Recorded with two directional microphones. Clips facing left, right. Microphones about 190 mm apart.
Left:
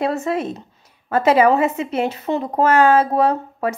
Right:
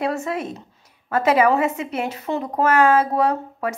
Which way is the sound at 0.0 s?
30° left (ahead or behind).